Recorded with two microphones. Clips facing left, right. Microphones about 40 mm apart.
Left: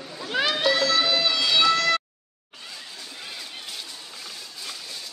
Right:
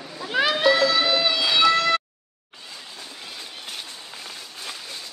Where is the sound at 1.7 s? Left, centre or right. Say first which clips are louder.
Right 2 dB; centre.